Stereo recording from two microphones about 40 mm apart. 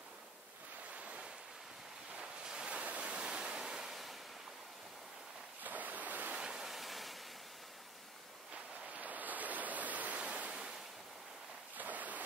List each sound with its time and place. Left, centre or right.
0.9 s waves: right
2.1 s waves: right
3.2 s waves: right
5.6 s waves: right
6.3 s waves: centre
6.7 s waterfall: centre
8.8 s a sound: right
10.2 s ocean: right
11.7 s a sound: right